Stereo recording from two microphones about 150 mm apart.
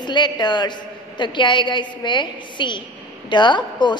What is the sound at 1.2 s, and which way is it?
A woman's voice, 30° left (ahead or behind).